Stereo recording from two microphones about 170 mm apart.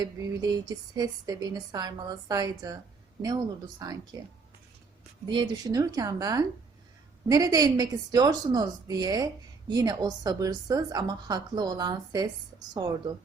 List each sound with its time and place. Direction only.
0.0 s a woman's voice: 25° right (ahead or behind)
3.8 s a woman's voice: 20° right (ahead or behind)
5.3 s a woman's voice: 25° right (ahead or behind)